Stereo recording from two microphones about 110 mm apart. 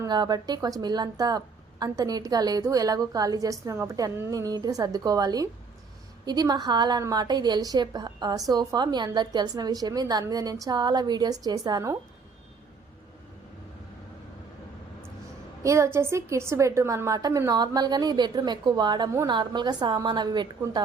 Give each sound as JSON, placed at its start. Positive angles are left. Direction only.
{"t": 0.1, "sound": "a woman's voice", "side_deg": -40}
{"t": 15.6, "sound": "a woman's voice", "side_deg": -25}